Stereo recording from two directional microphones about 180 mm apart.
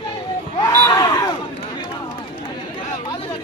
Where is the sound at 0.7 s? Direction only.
15° left (ahead or behind).